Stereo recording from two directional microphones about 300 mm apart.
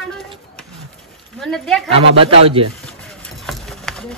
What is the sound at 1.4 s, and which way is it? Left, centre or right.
Speech, centre.